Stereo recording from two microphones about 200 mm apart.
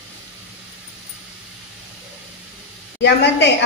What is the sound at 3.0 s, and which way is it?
Speech, 60° left (ahead or behind).